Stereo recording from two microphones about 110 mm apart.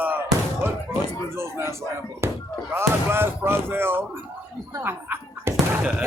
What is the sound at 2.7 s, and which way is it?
Speech, 20° right (ahead or behind).